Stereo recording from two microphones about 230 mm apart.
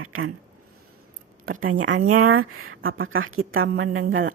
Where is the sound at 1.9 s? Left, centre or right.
Right.